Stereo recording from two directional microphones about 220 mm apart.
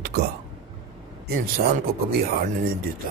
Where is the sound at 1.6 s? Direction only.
45° right (ahead or behind).